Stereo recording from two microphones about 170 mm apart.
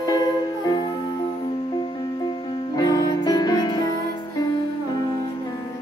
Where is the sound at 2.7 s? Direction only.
20° left (ahead or behind).